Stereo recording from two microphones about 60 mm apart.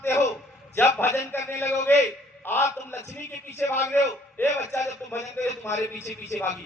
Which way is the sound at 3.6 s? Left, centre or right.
Left.